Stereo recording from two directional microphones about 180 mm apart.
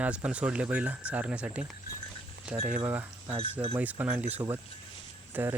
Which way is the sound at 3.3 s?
30° right (ahead or behind).